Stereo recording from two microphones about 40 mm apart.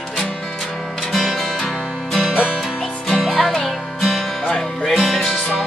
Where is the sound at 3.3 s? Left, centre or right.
Centre.